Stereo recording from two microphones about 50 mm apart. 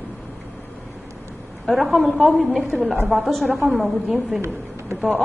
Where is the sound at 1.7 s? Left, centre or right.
Centre.